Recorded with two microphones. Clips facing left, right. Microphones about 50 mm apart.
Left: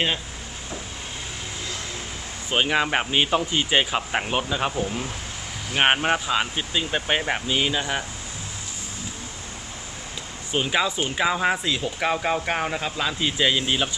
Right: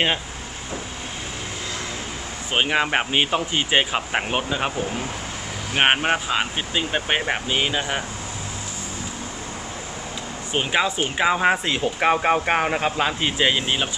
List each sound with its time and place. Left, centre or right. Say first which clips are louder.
2.5 s speech: right 1 dB; centre
5.7 s speech: right 1 dB; centre
10.5 s speech: right 1 dB; right
11.6 s speech: right 4 dB; right; by 13.9 s centre